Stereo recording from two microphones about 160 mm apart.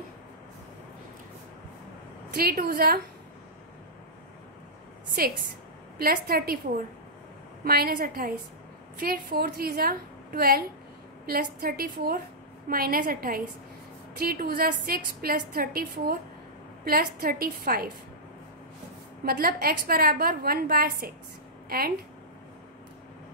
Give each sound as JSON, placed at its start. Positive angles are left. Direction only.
{"t": 2.3, "sound": "a woman's voice", "side_deg": -70}
{"t": 5.9, "sound": "a woman's voice", "side_deg": -70}
{"t": 7.6, "sound": "a woman's voice", "side_deg": -70}
{"t": 19.2, "sound": "a woman's voice", "side_deg": -70}